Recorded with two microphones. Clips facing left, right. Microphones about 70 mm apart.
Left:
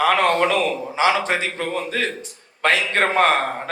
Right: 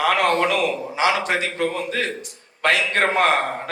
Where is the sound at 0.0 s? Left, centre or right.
Left.